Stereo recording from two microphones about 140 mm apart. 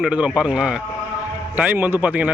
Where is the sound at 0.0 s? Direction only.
5° right (ahead or behind).